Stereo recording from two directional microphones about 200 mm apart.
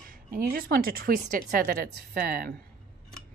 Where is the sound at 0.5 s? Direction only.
45° right (ahead or behind).